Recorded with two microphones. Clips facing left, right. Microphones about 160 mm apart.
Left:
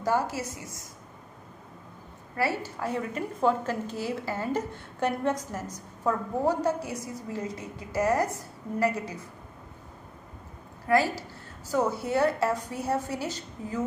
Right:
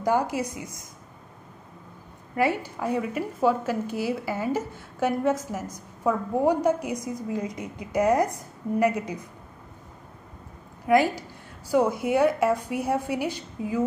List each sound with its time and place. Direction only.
0.0 s a woman's voice: 15° right (ahead or behind)
2.3 s a woman's voice: 15° right (ahead or behind)
10.9 s a woman's voice: 15° right (ahead or behind)